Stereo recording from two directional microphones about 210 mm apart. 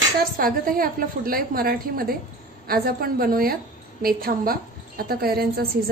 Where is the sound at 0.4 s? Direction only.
45° right (ahead or behind).